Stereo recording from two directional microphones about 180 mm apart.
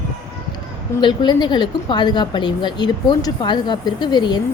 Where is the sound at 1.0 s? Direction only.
25° left (ahead or behind).